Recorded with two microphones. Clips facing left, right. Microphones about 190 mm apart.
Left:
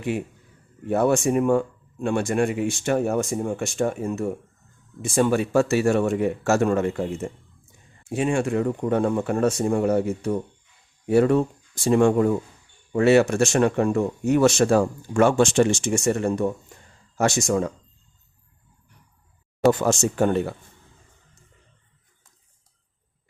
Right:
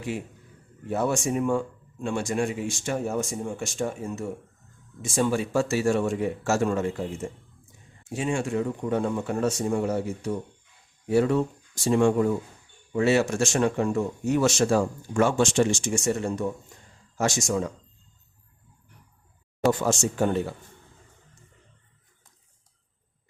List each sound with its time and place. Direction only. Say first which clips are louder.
0.9 s speech: left 6 dB; 60° left (ahead or behind)
8.1 s speech: left 4 dB; 60° left (ahead or behind)
19.8 s speech: left 3 dB; 60° left (ahead or behind)